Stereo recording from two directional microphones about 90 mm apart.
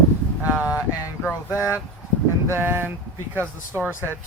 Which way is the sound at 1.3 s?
25° left (ahead or behind).